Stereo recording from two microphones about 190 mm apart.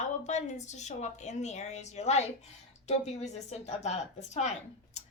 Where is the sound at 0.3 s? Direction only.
40° left (ahead or behind).